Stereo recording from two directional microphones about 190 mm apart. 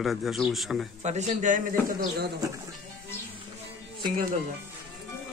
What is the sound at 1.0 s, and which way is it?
A man's voice, 40° right (ahead or behind).